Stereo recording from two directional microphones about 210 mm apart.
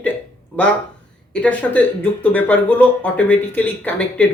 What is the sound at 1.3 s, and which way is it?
A woman's voice, 5° left (ahead or behind).